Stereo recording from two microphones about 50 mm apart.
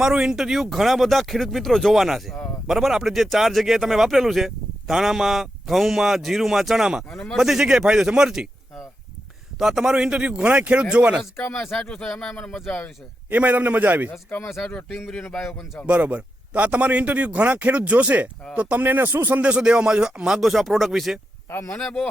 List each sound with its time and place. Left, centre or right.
0.0 s speech: centre
7.1 s speech: centre
7.3 s speech: centre
9.6 s speech: centre; by 11.2 s right
11.5 s speech: centre
13.3 s a man's voice: right
15.9 s speech: right
18.8 s a man's voice: right
19.4 s speech: right; by 21.2 s centre
21.8 s speech: centre